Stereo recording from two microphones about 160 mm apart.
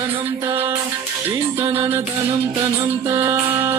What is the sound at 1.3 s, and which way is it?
Music, 15° right (ahead or behind).